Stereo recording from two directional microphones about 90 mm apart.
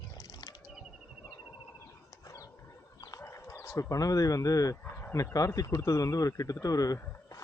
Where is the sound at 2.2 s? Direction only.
40° left (ahead or behind).